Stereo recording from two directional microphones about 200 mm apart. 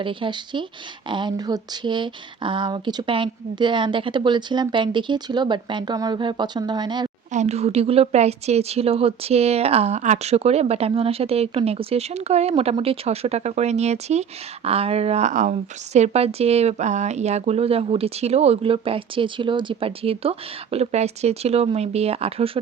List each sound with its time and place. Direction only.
0.0 s speech: 25° right (ahead or behind)
7.3 s speech: 35° right (ahead or behind)